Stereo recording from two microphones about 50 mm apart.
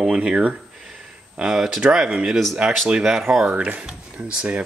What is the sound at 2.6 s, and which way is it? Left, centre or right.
Cutlery, right.